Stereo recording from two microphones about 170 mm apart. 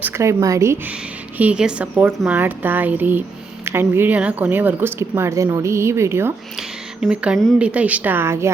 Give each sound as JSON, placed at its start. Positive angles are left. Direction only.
{"t": 0.0, "sound": "speech", "side_deg": -15}
{"t": 6.6, "sound": "speech", "side_deg": -5}